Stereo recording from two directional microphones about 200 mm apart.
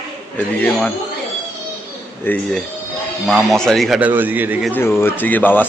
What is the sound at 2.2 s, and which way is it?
Speech, 5° left (ahead or behind).